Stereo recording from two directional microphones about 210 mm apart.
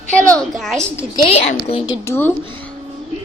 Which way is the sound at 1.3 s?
25° left (ahead or behind).